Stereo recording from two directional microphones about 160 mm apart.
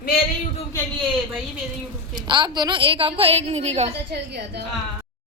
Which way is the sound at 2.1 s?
30° right (ahead or behind).